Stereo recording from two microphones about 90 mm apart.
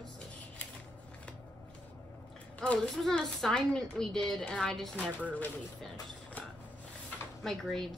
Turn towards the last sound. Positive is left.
turn(degrees=5)  # may be behind; listen again after turning